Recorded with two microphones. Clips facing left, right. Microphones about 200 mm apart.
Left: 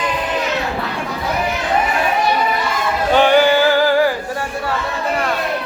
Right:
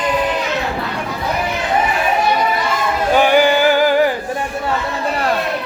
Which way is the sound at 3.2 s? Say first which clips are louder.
Left 1 dB; 10° right (ahead or behind).